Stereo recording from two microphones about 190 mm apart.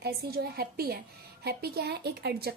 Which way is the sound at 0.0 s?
55° right (ahead or behind).